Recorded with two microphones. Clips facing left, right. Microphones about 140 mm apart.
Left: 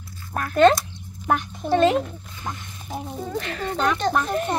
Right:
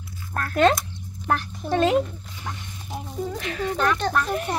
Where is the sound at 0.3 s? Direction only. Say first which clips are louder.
Left 2 dB; 10° left (ahead or behind).